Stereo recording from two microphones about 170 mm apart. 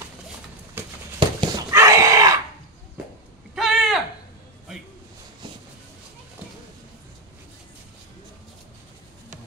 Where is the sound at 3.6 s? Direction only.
Centre (ahead or behind).